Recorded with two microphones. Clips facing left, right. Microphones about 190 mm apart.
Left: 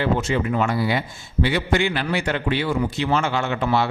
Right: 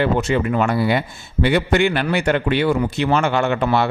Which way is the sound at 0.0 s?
60° right (ahead or behind).